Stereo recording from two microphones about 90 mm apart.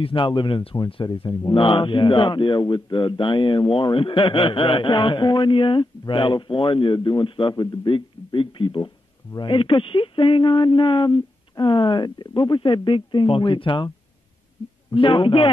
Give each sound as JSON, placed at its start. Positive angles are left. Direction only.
{"t": 0.0, "sound": "speech", "side_deg": 70}
{"t": 0.8, "sound": "a man's voice", "side_deg": 75}
{"t": 15.0, "sound": "speech", "side_deg": 75}